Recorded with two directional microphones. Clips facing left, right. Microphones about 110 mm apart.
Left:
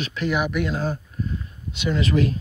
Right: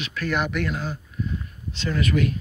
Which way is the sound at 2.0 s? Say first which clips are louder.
Left 1 dB; 30° left (ahead or behind).